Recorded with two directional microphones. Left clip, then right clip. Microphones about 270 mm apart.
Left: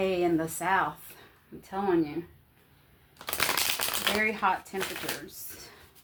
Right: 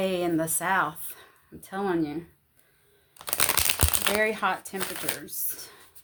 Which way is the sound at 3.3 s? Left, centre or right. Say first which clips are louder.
Right 1 dB; right.